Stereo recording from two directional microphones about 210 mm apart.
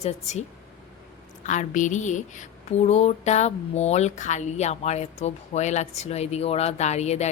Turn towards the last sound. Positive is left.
turn(degrees=30)  # may be behind; listen again after turning